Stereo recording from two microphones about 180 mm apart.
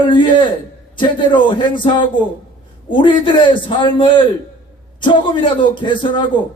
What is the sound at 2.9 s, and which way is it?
Speech, 25° left (ahead or behind).